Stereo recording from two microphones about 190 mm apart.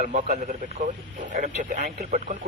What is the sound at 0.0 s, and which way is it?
Speech, 40° right (ahead or behind).